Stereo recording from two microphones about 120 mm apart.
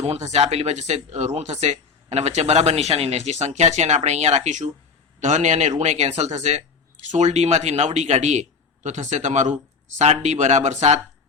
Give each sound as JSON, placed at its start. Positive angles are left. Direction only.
{"t": 0.0, "sound": "speech", "side_deg": -65}
{"t": 10.0, "sound": "speech", "side_deg": -70}